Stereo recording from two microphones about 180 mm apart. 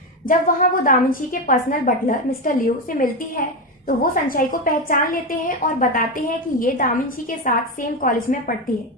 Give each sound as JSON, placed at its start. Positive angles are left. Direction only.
{"t": 0.3, "sound": "a woman's voice", "side_deg": 50}